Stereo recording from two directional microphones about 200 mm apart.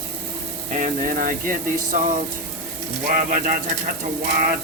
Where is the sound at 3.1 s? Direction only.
40° right (ahead or behind).